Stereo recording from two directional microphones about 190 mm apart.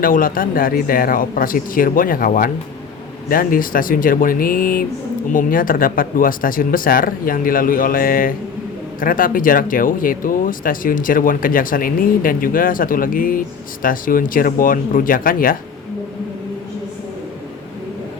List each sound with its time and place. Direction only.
0.0 s speech: 45° left (ahead or behind)